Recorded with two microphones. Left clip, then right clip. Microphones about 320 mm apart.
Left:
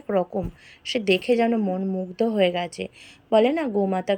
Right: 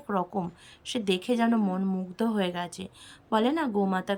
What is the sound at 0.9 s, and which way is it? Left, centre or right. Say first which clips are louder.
Speech: left 7 dB; centre.